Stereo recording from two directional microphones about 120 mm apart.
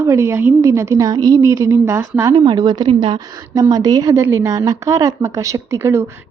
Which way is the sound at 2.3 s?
40° right (ahead or behind).